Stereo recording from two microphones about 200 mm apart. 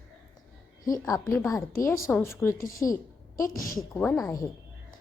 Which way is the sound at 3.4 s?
45° left (ahead or behind).